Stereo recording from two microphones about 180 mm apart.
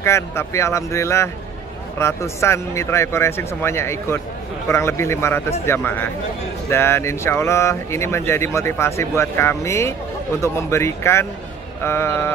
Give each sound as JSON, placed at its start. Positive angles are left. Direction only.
{"t": 0.0, "sound": "speech", "side_deg": 15}
{"t": 6.7, "sound": "speech", "side_deg": 15}